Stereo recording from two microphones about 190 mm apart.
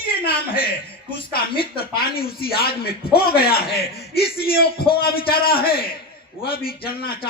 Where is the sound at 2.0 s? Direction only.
55° left (ahead or behind).